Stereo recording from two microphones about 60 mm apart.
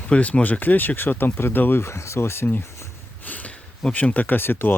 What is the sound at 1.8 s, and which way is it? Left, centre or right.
Speech, left.